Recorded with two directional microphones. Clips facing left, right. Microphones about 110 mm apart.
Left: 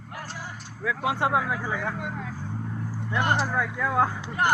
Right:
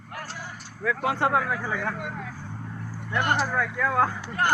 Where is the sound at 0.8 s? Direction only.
5° left (ahead or behind).